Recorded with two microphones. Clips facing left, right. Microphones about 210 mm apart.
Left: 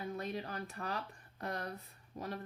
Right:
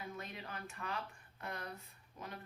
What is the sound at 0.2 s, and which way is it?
Speech, 35° left (ahead or behind).